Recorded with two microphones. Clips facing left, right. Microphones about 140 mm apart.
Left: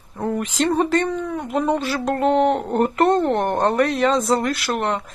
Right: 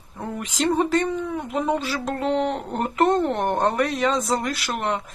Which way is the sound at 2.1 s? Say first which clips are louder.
Left 6 dB; 50° left (ahead or behind).